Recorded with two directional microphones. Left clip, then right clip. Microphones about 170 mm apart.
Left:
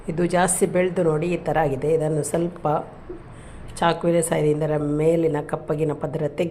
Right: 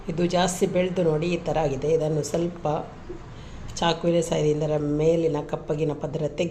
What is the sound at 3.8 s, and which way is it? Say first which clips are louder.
Speech: left 3 dB; 10° left (ahead or behind).